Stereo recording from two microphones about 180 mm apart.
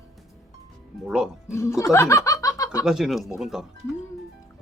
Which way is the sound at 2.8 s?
Centre (ahead or behind).